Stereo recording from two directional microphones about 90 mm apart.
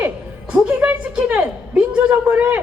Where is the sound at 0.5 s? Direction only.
15° right (ahead or behind).